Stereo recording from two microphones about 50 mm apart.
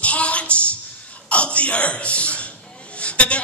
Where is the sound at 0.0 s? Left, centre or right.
Left.